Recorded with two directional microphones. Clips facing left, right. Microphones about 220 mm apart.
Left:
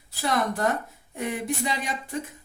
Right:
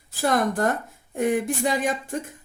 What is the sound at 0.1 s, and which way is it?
Speech, 50° right (ahead or behind).